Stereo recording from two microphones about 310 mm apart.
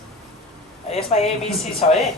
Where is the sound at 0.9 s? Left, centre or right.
Centre.